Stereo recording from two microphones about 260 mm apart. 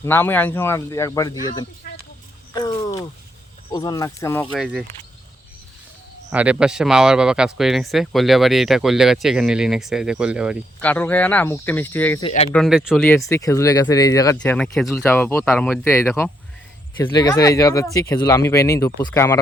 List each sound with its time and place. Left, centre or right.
0.0 s speech: centre
4.5 s speech: centre
6.3 s speech: centre
12.2 s speech: left
12.5 s speech: centre
13.1 s speech: centre